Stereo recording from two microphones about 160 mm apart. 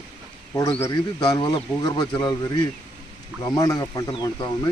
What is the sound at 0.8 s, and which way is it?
Speech, 20° left (ahead or behind).